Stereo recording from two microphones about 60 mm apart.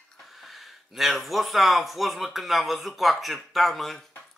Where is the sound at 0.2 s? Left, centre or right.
Centre.